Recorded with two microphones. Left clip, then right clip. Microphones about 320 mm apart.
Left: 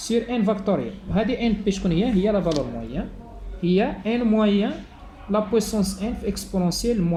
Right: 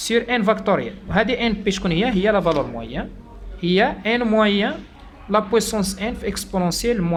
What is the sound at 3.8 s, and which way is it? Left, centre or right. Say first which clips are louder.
Speech: right 5 dB; right.